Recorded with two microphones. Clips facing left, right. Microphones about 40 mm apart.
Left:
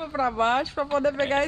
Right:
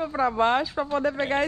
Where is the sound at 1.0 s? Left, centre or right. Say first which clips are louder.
Left 2 dB; left.